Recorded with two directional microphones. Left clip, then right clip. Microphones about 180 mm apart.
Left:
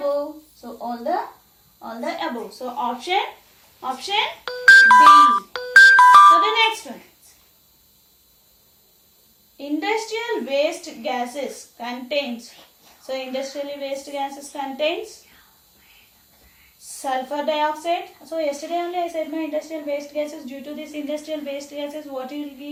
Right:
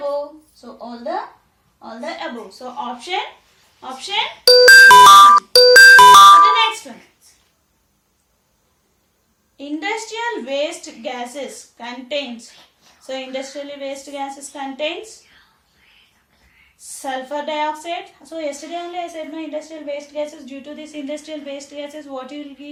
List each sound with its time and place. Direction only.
0.8 s speech: 5° left (ahead or behind)
4.4 s music: 50° right (ahead or behind)
9.6 s speech: 10° right (ahead or behind)
17.0 s speech: 10° right (ahead or behind)